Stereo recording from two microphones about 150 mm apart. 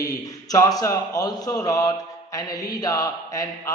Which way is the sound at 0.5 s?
25° left (ahead or behind).